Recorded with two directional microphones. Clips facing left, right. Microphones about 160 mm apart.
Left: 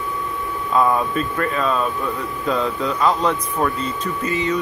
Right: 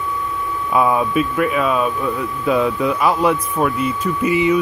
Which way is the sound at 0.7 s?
10° right (ahead or behind).